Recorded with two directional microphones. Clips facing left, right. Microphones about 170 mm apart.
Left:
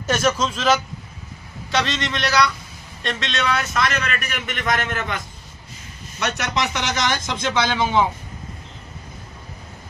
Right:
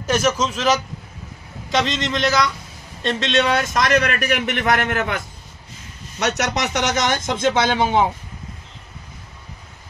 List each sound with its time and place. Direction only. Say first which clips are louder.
0.0 s a man's voice: right 1 dB; 10° right (ahead or behind); by 3.8 s 35° right (ahead or behind)
4.0 s a man's voice: right 7 dB; 55° right (ahead or behind)
6.3 s a man's voice: right 2 dB; 65° right (ahead or behind)
6.9 s speech: right 3 dB; 45° right (ahead or behind)